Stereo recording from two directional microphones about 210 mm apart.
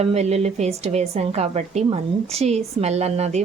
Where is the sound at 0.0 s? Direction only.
30° right (ahead or behind).